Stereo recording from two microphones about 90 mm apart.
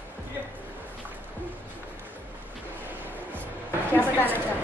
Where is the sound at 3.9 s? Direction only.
20° left (ahead or behind).